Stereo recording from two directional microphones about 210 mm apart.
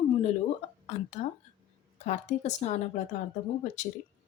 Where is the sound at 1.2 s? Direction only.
30° left (ahead or behind).